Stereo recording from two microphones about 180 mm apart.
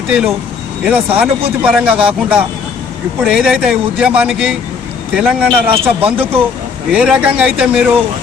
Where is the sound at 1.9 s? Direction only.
30° right (ahead or behind).